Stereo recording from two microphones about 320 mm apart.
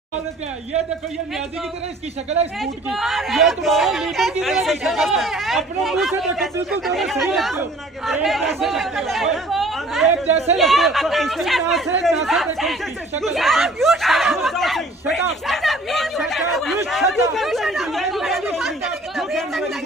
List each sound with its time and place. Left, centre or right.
2.6 s speech: centre
10.2 s speech: centre
10.6 s speech: centre
15.4 s chatter: centre
19.1 s speech: centre